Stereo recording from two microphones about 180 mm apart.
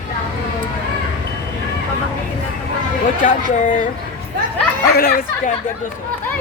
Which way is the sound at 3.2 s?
45° left (ahead or behind).